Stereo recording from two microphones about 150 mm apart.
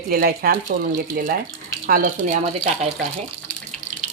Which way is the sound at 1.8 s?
75° right (ahead or behind).